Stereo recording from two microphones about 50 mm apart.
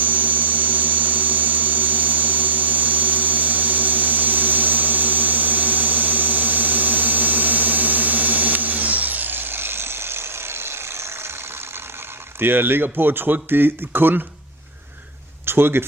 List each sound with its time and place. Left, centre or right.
0.0 s a sound: right
12.4 s speech: right
15.4 s speech: right